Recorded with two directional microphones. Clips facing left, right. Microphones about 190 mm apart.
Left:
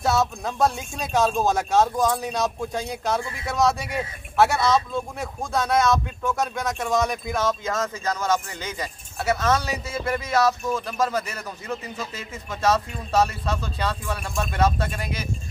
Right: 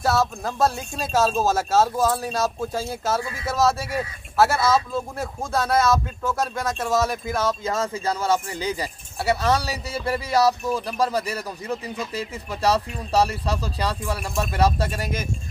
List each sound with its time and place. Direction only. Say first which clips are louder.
0.0 s speech: right 1 dB; centre (ahead or behind)
7.6 s speech: right 2 dB; 30° right (ahead or behind)